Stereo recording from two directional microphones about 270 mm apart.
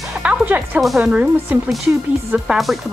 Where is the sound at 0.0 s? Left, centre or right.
Centre.